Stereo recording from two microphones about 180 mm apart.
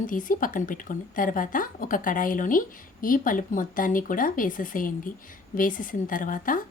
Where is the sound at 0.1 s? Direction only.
50° left (ahead or behind).